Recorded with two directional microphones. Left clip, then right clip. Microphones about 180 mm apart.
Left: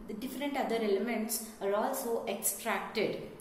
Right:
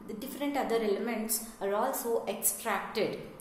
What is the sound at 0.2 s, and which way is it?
A woman's voice, 15° right (ahead or behind).